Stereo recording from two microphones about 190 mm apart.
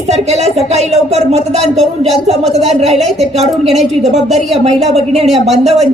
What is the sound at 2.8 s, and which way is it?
Speech, centre (ahead or behind).